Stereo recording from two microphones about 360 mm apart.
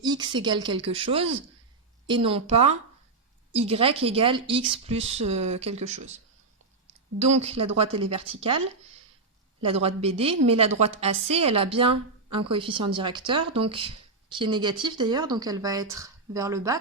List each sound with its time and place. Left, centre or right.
0.0 s a woman's voice: centre
7.4 s a woman's voice: centre